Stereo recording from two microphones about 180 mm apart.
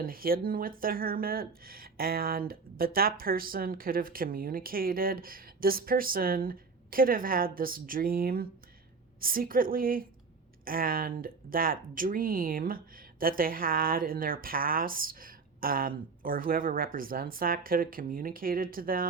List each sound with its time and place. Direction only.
0.0 s speech: 55° right (ahead or behind)